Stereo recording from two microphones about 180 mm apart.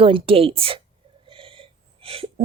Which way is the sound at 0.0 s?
30° right (ahead or behind).